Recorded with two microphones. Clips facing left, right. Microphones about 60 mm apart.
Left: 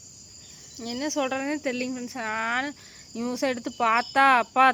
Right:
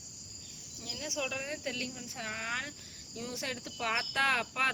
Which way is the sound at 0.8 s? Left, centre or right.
Left.